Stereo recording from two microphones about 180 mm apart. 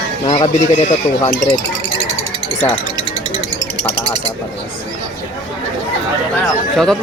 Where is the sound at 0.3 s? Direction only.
35° left (ahead or behind).